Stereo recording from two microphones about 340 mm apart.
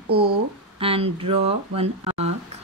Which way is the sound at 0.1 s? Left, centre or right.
Centre.